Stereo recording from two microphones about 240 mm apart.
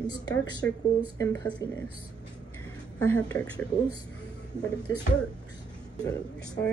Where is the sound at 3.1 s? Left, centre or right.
Centre.